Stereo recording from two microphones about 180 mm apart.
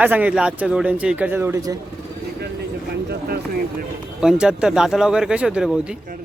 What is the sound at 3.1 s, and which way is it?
Speech, 60° right (ahead or behind).